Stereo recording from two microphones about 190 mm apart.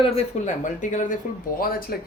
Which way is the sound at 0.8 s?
40° left (ahead or behind).